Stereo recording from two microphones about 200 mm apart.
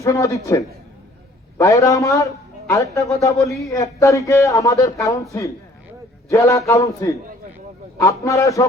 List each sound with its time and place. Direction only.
0.0 s a man's voice: 15° left (ahead or behind)